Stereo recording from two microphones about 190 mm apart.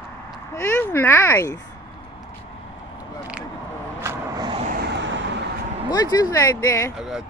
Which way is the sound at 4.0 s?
20° right (ahead or behind).